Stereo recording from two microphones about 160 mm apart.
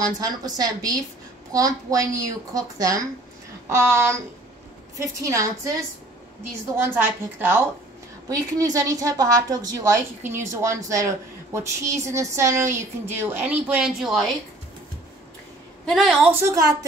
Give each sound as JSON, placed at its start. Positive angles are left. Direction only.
{"t": 0.2, "sound": "a woman's voice", "side_deg": -25}
{"t": 6.8, "sound": "a woman's voice", "side_deg": -15}
{"t": 15.8, "sound": "a woman's voice", "side_deg": 0}
{"t": 16.3, "sound": "a woman's voice", "side_deg": -20}